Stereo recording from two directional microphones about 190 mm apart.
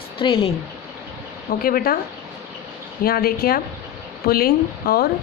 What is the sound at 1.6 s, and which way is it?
Speech, 50° left (ahead or behind).